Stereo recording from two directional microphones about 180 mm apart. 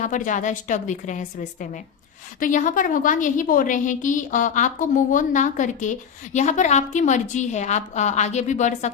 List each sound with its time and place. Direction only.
0.0 s a woman's voice: 45° left (ahead or behind)